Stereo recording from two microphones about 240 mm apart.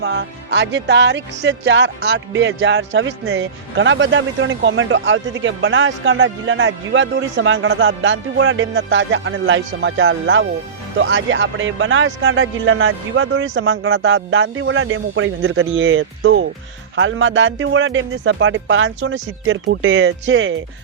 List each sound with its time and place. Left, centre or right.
0.0 s speech: right